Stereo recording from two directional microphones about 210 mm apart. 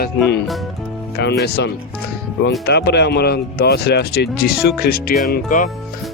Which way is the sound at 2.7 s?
50° left (ahead or behind).